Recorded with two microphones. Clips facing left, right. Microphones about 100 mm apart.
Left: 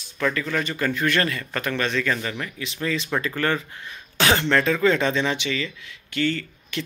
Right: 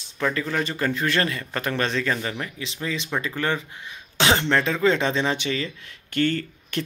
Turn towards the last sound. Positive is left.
turn(degrees=-45)  # may be behind; listen again after turning